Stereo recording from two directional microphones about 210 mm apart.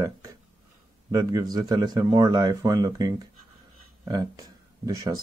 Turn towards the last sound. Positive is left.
turn(degrees=-15)  # may be behind; listen again after turning